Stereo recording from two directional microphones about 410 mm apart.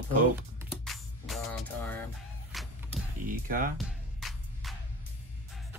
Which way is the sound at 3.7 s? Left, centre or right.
Centre.